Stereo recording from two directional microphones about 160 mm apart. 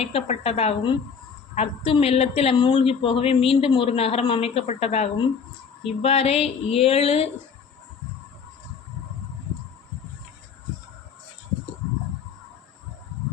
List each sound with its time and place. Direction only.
0.0 s a woman's voice: 35° left (ahead or behind)